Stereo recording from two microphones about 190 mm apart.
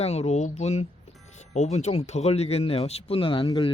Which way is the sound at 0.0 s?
35° left (ahead or behind).